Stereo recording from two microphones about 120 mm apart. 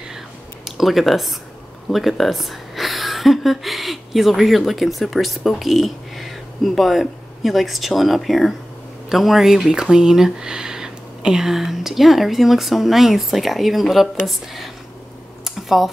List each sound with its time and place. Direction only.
0.7 s speech: centre (ahead or behind)
15.4 s computer keyboard: centre (ahead or behind)